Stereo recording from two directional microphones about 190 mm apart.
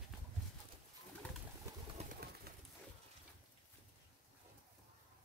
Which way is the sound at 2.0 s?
35° right (ahead or behind).